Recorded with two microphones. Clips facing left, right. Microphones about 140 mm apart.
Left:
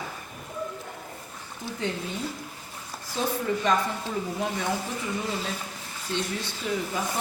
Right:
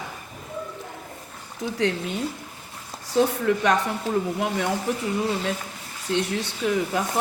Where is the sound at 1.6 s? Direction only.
80° right.